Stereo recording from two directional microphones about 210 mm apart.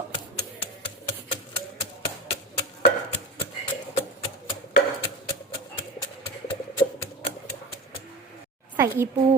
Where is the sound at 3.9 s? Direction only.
25° left (ahead or behind).